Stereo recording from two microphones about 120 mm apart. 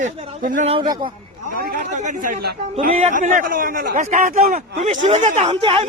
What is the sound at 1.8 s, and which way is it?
Speech, 90° right.